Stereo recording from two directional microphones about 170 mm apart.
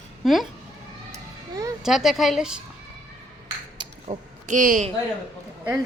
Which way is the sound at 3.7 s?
30° right (ahead or behind).